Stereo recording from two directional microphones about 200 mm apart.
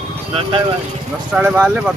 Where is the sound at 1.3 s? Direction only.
5° right (ahead or behind).